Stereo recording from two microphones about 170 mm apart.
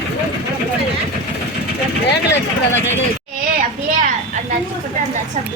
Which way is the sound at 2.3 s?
90° left.